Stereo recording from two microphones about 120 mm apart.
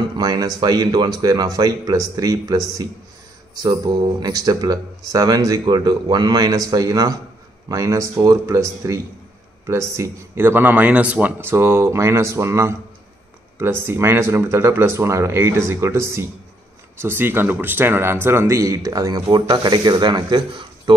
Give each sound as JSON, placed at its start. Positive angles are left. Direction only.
{"t": 0.2, "sound": "speech", "side_deg": -35}
{"t": 3.6, "sound": "speech", "side_deg": -30}